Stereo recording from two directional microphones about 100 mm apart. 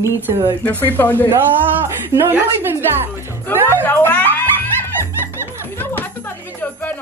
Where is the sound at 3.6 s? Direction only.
25° left (ahead or behind).